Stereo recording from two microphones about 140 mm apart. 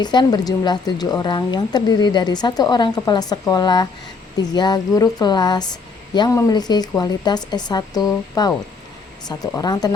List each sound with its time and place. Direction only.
0.0 s a woman's voice: 30° left (ahead or behind)